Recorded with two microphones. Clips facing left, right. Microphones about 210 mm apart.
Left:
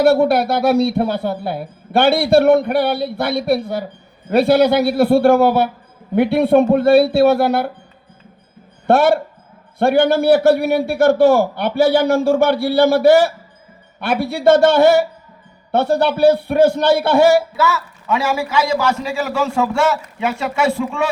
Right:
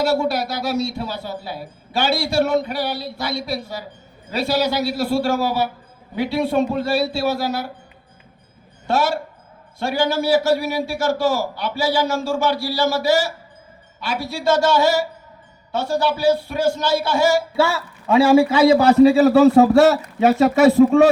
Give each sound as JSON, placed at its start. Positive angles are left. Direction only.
{"t": 0.0, "sound": "speech", "side_deg": 60}
{"t": 8.9, "sound": "speech", "side_deg": 60}
{"t": 17.6, "sound": "a man's voice", "side_deg": -30}